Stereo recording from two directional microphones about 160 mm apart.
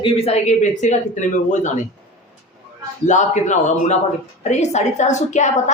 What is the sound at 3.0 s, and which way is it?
A woman's voice, 50° left (ahead or behind).